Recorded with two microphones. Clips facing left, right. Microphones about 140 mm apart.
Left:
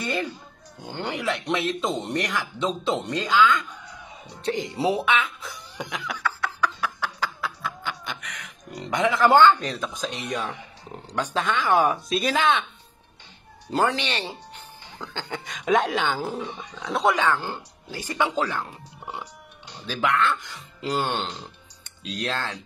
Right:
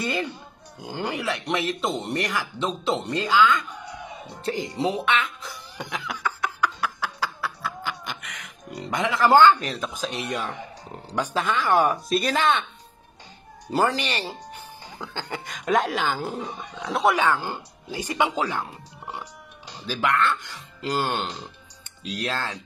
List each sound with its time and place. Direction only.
0.8 s speech: 10° right (ahead or behind)
3.6 s chicken: 70° right (ahead or behind)
4.4 s speech: centre (ahead or behind)
6.1 s a sound: 15° right (ahead or behind)
11.1 s speech: 10° right (ahead or behind)
13.7 s speech: 5° right (ahead or behind)
16.5 s speech: 55° right (ahead or behind)
16.8 s speech: centre (ahead or behind)
17.2 s speech: 10° right (ahead or behind)
19.9 s speech: centre (ahead or behind)